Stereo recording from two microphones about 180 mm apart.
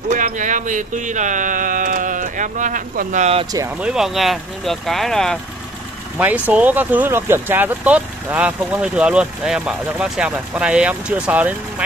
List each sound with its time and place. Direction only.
0.1 s speech: 45° right (ahead or behind)
3.8 s speech: 5° right (ahead or behind)
6.1 s speech: 10° right (ahead or behind)